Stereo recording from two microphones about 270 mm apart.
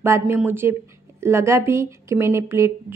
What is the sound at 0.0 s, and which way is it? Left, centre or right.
Speech, centre.